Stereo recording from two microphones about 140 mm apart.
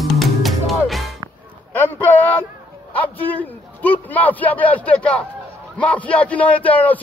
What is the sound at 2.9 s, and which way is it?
A man's voice, 10° left (ahead or behind).